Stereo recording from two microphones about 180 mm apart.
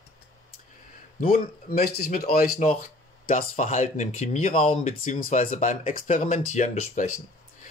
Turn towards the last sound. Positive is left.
turn(degrees=40)  # may be behind; listen again after turning